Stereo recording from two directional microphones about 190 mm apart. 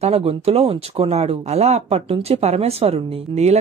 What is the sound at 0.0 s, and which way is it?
Speech, 30° right (ahead or behind).